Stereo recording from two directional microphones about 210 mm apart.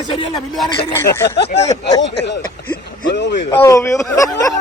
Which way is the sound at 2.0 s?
55° left (ahead or behind).